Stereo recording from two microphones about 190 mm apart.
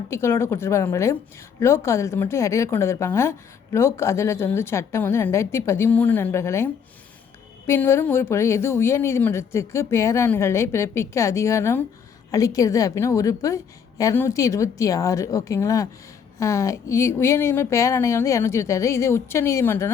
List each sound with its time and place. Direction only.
0.1 s a woman's voice: 15° left (ahead or behind)
7.7 s a woman's voice: 15° left (ahead or behind)